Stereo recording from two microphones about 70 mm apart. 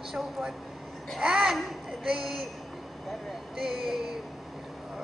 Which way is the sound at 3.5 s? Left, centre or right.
Centre.